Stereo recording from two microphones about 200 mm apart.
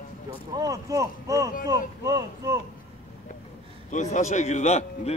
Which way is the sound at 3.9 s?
40° left (ahead or behind).